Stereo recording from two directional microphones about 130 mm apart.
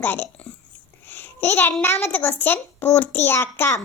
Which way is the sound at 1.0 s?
15° left (ahead or behind).